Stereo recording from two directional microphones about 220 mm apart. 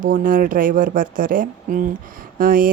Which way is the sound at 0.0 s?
40° right (ahead or behind).